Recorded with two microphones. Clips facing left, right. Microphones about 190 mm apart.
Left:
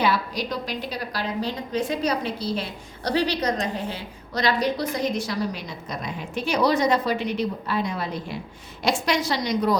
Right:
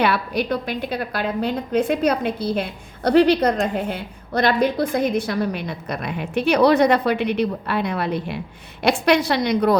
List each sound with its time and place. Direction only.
0.0 s a woman's voice: 60° right (ahead or behind)